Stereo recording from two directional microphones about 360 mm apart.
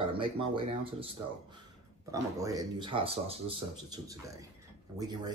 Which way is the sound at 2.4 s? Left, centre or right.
Centre.